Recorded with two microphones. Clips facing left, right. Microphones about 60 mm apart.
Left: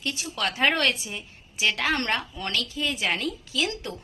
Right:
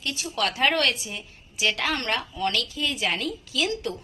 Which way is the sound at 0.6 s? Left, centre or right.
Left.